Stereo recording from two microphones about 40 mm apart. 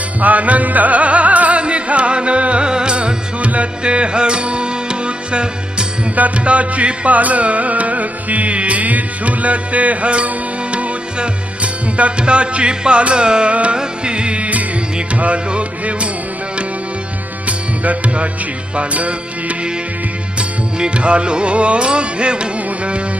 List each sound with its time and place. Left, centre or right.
0.2 s music: right
17.4 s music: right
20.7 s music: right